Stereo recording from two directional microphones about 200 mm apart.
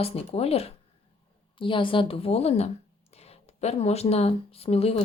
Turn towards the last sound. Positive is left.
turn(degrees=30)  # may be behind; listen again after turning